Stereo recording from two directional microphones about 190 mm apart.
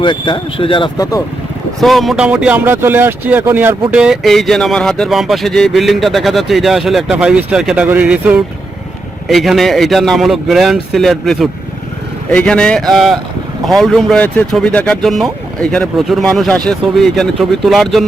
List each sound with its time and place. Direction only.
0.0 s speech: 25° left (ahead or behind)
1.8 s speech: centre (ahead or behind)